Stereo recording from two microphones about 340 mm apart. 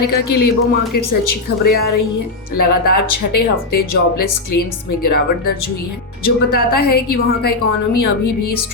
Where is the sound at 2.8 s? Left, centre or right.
Left.